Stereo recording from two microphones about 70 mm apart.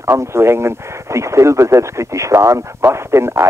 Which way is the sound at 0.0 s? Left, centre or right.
Right.